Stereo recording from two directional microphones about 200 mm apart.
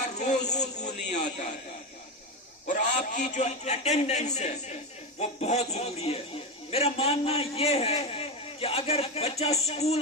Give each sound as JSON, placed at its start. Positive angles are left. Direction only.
{"t": 0.2, "sound": "a man's voice", "side_deg": 35}
{"t": 2.6, "sound": "a man's voice", "side_deg": 40}